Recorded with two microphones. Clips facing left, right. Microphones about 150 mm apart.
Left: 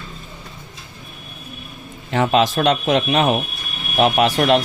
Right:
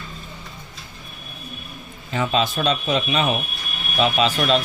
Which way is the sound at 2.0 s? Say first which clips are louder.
Left 5 dB; 65° left (ahead or behind).